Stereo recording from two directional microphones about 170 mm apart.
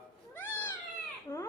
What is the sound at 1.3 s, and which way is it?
Speech, 25° left (ahead or behind).